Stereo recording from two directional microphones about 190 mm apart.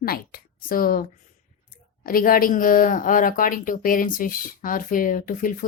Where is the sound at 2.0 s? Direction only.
50° left (ahead or behind).